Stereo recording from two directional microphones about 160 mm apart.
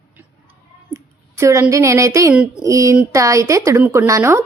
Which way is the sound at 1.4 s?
20° right (ahead or behind).